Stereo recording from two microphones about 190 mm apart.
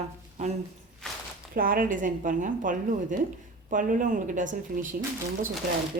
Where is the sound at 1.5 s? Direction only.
50° right (ahead or behind).